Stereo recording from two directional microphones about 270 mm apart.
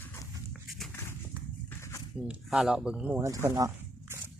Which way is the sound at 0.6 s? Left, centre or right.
Centre.